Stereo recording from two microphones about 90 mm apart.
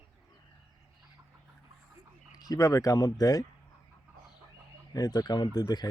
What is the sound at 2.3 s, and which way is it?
Speech, 45° left (ahead or behind).